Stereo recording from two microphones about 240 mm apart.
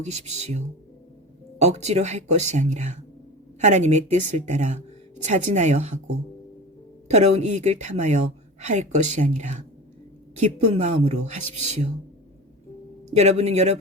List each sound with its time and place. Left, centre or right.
0.0 s a woman's voice: right
7.1 s a woman's voice: right
13.1 s a woman's voice: right